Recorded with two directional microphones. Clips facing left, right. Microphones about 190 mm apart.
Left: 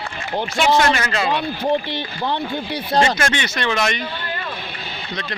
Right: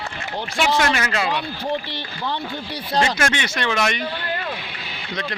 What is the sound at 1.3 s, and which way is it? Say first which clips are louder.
Speech: left 5 dB; 50° left (ahead or behind).